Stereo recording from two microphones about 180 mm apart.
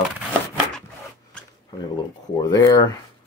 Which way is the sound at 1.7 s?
25° left (ahead or behind).